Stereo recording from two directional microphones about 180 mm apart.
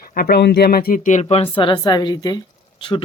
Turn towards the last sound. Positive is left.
turn(degrees=25)  # may be behind; listen again after turning